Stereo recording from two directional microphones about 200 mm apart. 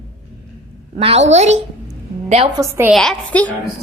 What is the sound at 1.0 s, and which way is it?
A woman's voice, 30° right (ahead or behind).